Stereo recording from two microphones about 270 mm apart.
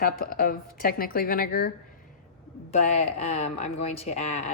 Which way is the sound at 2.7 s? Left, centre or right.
Left.